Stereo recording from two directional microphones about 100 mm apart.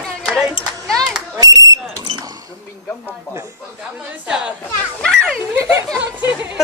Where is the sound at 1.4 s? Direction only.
35° right (ahead or behind).